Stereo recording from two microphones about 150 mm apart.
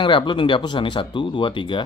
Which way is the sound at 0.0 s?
30° left (ahead or behind).